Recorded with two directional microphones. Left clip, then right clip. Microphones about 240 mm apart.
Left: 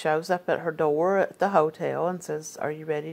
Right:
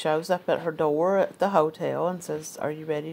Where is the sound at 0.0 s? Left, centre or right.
Left.